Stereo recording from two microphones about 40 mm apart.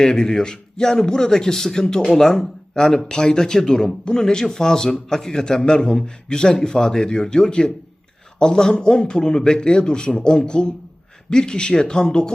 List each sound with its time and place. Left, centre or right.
0.0 s a man's voice: centre